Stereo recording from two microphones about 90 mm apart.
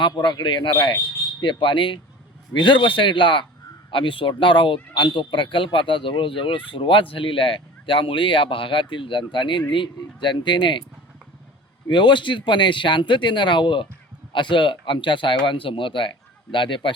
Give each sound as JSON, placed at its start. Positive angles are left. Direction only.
{"t": 0.0, "sound": "speech", "side_deg": 60}
{"t": 11.9, "sound": "speech", "side_deg": 60}